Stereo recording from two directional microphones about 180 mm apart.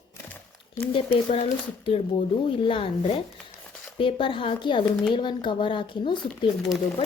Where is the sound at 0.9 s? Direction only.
30° left (ahead or behind).